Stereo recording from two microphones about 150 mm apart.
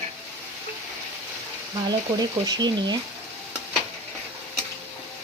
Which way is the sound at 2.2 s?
25° right (ahead or behind).